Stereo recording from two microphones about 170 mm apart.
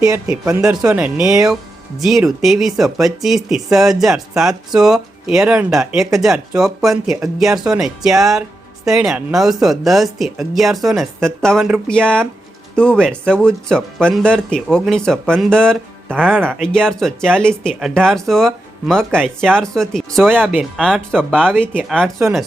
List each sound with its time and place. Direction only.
0.3 s speech: 15° right (ahead or behind)
0.6 s speech: 5° right (ahead or behind)
16.1 s speech: 10° right (ahead or behind)
16.6 s speech: centre (ahead or behind)
20.2 s speech: 10° right (ahead or behind); by 21.5 s 5° left (ahead or behind)
22.2 s speech: 15° right (ahead or behind)